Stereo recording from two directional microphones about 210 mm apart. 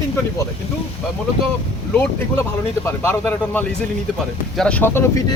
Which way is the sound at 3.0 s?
10° left (ahead or behind).